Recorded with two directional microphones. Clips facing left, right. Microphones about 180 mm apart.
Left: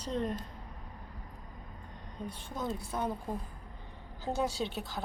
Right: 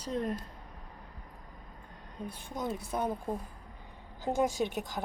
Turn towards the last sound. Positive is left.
turn(degrees=-15)  # may be behind; listen again after turning